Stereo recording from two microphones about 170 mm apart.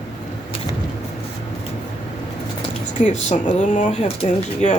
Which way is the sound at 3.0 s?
40° left (ahead or behind).